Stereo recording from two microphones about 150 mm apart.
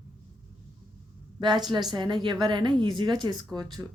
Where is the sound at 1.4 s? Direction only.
30° right (ahead or behind).